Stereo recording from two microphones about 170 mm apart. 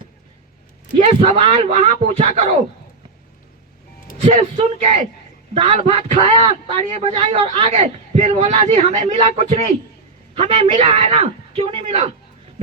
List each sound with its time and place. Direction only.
1.0 s a man's voice: 35° right (ahead or behind)
4.2 s a man's voice: 45° right (ahead or behind)